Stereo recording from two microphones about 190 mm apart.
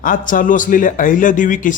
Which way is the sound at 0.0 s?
45° left (ahead or behind).